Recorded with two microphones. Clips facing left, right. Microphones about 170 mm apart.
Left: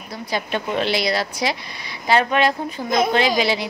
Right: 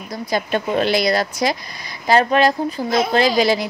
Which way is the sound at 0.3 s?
45° right (ahead or behind).